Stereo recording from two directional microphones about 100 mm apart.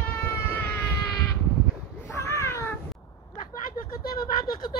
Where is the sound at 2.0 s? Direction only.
30° left (ahead or behind).